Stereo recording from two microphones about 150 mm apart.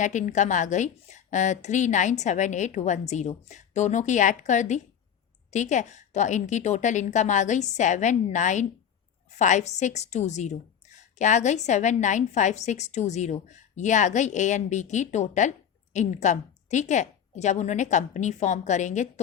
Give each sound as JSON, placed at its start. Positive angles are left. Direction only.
{"t": 0.0, "sound": "a woman's voice", "side_deg": 55}